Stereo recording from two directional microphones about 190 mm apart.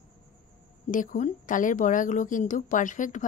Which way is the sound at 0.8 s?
45° left (ahead or behind).